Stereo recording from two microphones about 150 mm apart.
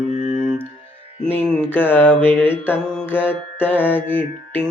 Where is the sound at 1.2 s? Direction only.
10° left (ahead or behind).